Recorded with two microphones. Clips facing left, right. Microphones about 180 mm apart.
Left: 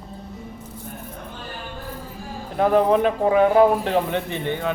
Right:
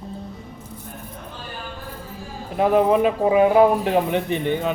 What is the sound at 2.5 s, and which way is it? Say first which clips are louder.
Speech: even; 10° right (ahead or behind).